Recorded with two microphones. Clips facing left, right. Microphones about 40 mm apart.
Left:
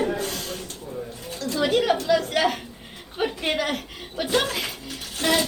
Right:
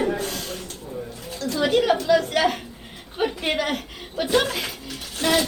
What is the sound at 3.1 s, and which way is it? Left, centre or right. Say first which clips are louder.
Chuckle: right 1 dB; centre.